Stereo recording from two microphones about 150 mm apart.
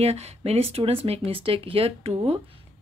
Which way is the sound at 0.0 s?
45° right (ahead or behind).